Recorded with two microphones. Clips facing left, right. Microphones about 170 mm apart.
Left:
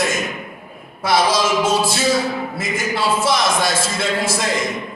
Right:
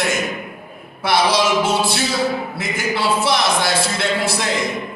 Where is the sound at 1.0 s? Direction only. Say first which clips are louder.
Even; 65° right (ahead or behind).